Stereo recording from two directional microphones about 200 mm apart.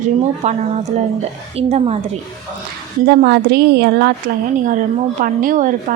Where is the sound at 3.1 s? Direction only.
55° right (ahead or behind).